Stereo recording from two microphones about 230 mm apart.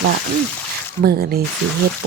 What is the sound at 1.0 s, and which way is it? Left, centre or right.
Speech, right.